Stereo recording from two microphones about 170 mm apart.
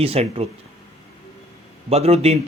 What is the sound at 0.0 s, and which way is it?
Speech, 35° right (ahead or behind).